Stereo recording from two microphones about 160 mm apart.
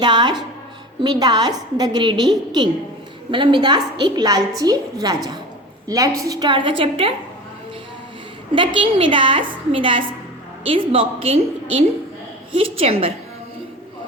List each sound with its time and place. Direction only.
0.0 s a woman's voice: 25° right (ahead or behind)
8.5 s a woman's voice: 30° right (ahead or behind)